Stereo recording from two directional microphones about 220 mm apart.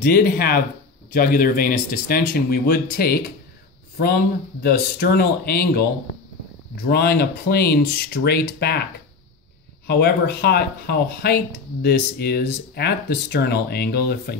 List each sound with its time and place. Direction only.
0.0 s speech: 45° left (ahead or behind)
4.6 s speech: 45° left (ahead or behind)
6.9 s speech: 45° left (ahead or behind)
9.8 s speech: 50° left (ahead or behind)